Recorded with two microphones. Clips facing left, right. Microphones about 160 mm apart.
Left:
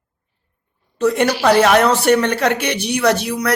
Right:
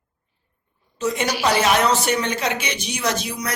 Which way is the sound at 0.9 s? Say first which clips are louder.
Left 7 dB; 60° left (ahead or behind).